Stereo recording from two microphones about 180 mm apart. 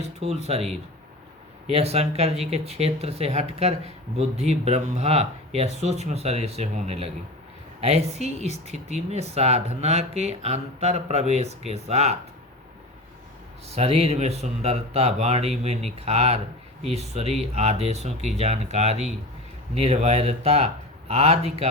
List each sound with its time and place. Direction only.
0.0 s speech: 35° right (ahead or behind)
13.7 s speech: 35° right (ahead or behind)